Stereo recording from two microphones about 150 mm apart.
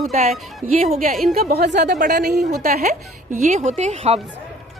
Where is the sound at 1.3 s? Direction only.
90° right.